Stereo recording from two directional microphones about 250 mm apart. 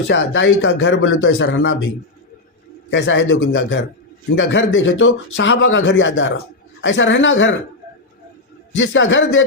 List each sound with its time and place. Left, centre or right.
0.1 s speech: left
2.9 s speech: left
8.7 s speech: left